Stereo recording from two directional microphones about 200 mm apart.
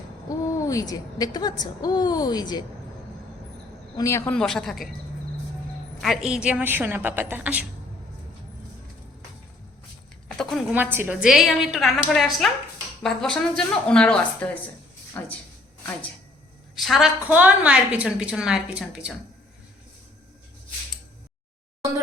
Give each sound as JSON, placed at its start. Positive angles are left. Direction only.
{"t": 0.3, "sound": "a woman's voice", "side_deg": 15}
{"t": 3.9, "sound": "a woman's voice", "side_deg": 15}
{"t": 4.4, "sound": "a woman's voice", "side_deg": 0}
{"t": 6.0, "sound": "a woman's voice", "side_deg": 0}
{"t": 10.2, "sound": "a sound", "side_deg": 0}
{"t": 10.9, "sound": "a woman's voice", "side_deg": -10}
{"t": 16.7, "sound": "a woman's voice", "side_deg": 0}